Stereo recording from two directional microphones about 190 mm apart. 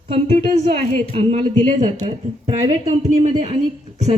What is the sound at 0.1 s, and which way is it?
Speech, 35° right (ahead or behind).